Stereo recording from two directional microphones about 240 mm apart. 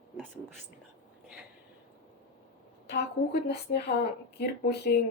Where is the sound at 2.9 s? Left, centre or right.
Left.